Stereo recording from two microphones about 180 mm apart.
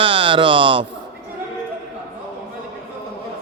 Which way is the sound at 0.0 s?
30° right (ahead or behind).